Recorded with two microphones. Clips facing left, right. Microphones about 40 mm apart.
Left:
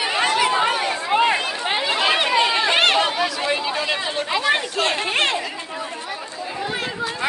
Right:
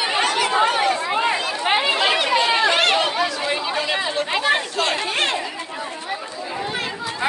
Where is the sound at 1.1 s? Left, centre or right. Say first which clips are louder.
Left 2 dB; left.